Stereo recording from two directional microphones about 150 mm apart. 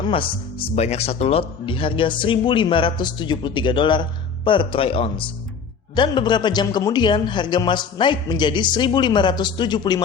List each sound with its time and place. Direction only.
0.0 s a man's voice: 35° left (ahead or behind)